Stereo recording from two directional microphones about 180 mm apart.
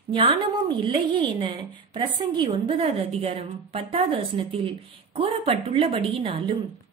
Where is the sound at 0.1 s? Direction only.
30° right (ahead or behind).